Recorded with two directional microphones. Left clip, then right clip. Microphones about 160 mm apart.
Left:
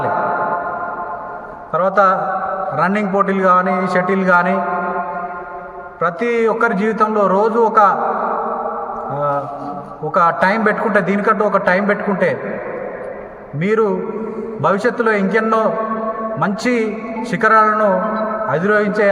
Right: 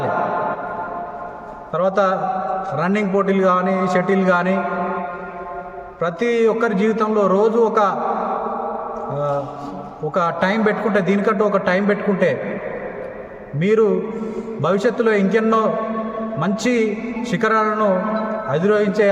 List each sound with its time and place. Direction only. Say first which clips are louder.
1.7 s a man's voice: left 4 dB; 20° right (ahead or behind)
6.0 s a man's voice: left 2 dB; 20° right (ahead or behind)
9.1 s a sound: left 3 dB; 20° right (ahead or behind)
10.2 s a man's voice: left 5 dB; 15° right (ahead or behind)
13.6 s a man's voice: even; 20° right (ahead or behind)